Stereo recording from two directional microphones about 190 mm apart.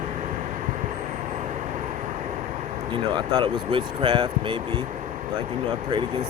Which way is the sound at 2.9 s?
25° right (ahead or behind).